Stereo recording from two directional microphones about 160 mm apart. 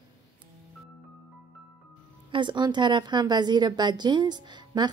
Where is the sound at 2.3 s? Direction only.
30° right (ahead or behind).